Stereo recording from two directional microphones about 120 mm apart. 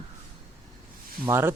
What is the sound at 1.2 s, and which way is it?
Speech, 20° right (ahead or behind).